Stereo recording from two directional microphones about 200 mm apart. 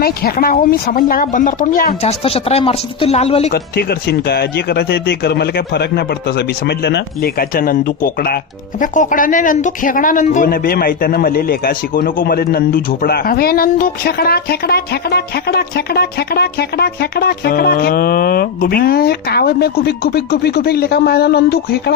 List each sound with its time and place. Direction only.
0.0 s speech: 50° left (ahead or behind)
2.0 s speech: 30° left (ahead or behind)
3.5 s speech: 50° left (ahead or behind)